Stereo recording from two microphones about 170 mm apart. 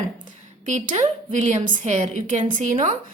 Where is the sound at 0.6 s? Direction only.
45° right (ahead or behind).